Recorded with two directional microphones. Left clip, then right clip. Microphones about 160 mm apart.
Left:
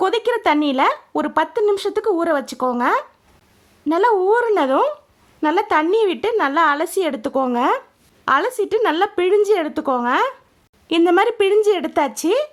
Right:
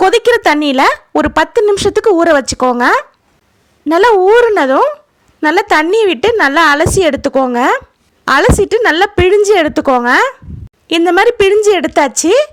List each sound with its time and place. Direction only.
0.0 s a woman's voice: 20° right (ahead or behind)